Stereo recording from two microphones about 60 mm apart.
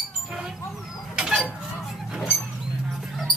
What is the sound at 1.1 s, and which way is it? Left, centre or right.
Chicken, centre.